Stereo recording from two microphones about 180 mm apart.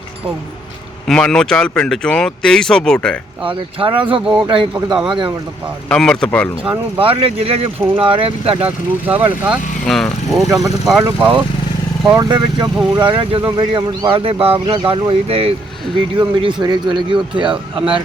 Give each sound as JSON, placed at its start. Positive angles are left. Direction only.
{"t": 1.0, "sound": "speech", "side_deg": 5}
{"t": 3.4, "sound": "speech", "side_deg": -30}
{"t": 5.9, "sound": "speech", "side_deg": 5}
{"t": 7.0, "sound": "speech", "side_deg": -30}
{"t": 8.6, "sound": "speech", "side_deg": -10}
{"t": 9.8, "sound": "speech", "side_deg": 0}
{"t": 12.1, "sound": "speech", "side_deg": -25}